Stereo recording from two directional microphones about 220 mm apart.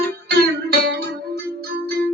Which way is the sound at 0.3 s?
45° right (ahead or behind).